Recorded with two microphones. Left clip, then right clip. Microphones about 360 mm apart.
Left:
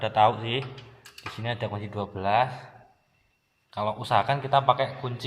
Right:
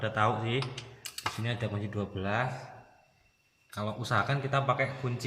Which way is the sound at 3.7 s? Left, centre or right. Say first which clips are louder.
Left 7 dB; centre.